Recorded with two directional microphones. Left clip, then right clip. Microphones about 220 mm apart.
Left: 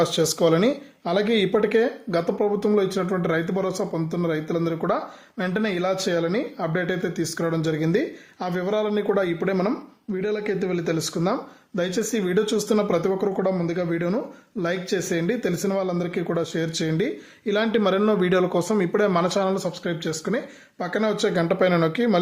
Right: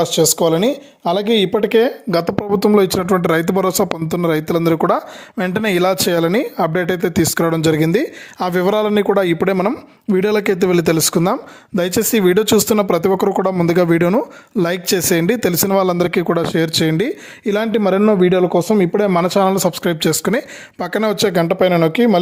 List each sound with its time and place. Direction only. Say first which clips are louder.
0.0 s speech: right 6 dB; 25° right (ahead or behind)